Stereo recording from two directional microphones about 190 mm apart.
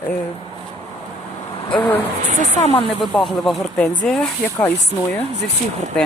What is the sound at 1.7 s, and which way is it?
Speech, 5° left (ahead or behind).